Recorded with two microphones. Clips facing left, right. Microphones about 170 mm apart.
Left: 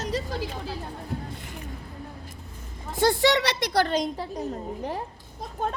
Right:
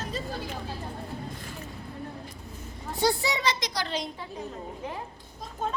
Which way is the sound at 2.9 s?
90° left.